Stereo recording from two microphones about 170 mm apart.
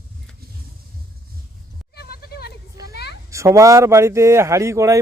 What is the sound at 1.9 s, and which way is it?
Goat, 70° left (ahead or behind).